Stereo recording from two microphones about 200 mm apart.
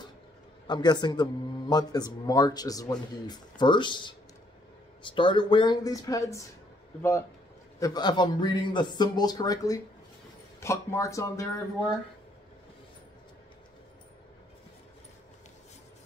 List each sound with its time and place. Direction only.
0.7 s speech: 20° left (ahead or behind)